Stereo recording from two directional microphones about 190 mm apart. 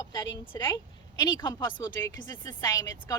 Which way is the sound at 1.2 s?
20° left (ahead or behind).